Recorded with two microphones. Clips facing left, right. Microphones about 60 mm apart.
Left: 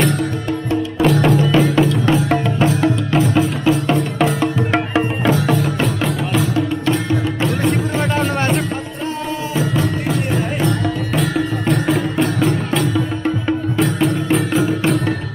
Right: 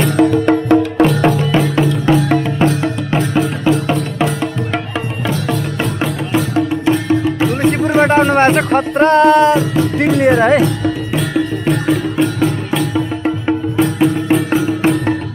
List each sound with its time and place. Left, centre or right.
0.2 s music: right
1.0 s music: centre
7.4 s music: centre
8.0 s music: right
11.1 s music: centre